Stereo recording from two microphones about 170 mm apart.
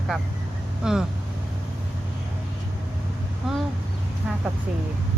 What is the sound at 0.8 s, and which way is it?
Speech, 5° right (ahead or behind).